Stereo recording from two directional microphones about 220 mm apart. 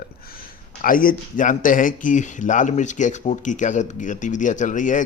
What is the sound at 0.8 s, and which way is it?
A man's voice, 40° left (ahead or behind).